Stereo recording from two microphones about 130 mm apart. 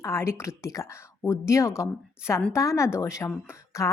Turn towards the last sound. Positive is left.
turn(degrees=20)  # may be behind; listen again after turning